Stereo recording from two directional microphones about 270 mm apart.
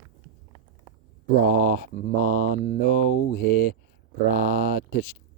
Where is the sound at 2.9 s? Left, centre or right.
Left.